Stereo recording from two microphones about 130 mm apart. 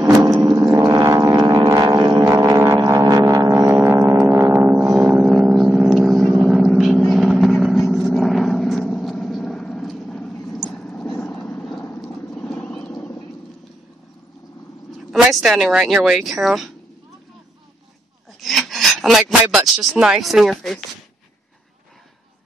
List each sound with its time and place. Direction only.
0.0 s a sound: 25° right (ahead or behind)
0.7 s didgeridoo: 25° right (ahead or behind)
1.7 s music: 30° right (ahead or behind); by 6.3 s centre (ahead or behind)
6.3 s vehicle: 5° right (ahead or behind); by 12.9 s 10° left (ahead or behind)
15.0 s speech: 5° right (ahead or behind)
18.4 s filing: centre (ahead or behind)
19.4 s speech: 5° right (ahead or behind)